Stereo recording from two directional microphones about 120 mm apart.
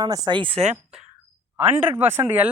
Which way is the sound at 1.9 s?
15° right (ahead or behind).